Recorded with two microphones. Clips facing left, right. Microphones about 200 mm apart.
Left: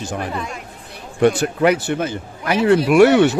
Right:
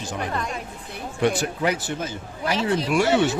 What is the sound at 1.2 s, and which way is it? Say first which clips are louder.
A man's voice: left 7 dB; 60° left (ahead or behind).